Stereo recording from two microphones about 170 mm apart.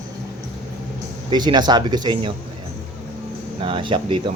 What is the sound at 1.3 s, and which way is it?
Speech, 25° right (ahead or behind).